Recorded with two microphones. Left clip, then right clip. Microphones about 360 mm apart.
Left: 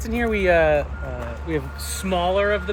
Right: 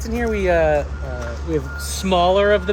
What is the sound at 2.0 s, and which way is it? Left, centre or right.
Speech, right.